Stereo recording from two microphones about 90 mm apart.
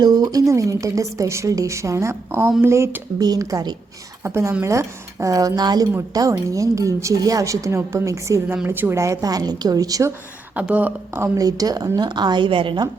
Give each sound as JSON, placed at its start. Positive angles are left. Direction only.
{"t": 0.0, "sound": "a woman's voice", "side_deg": -45}
{"t": 3.2, "sound": "a woman's voice", "side_deg": -40}
{"t": 4.2, "sound": "a woman's voice", "side_deg": -30}
{"t": 8.6, "sound": "a woman's voice", "side_deg": -20}
{"t": 10.5, "sound": "speech", "side_deg": -15}
{"t": 11.2, "sound": "a woman's voice", "side_deg": -40}